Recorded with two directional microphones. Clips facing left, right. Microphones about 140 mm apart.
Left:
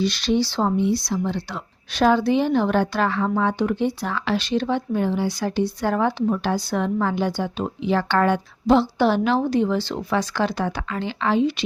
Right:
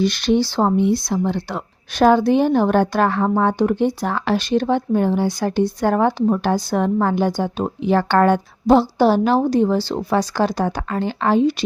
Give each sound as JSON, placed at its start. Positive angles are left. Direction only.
{"t": 0.0, "sound": "speech", "side_deg": -50}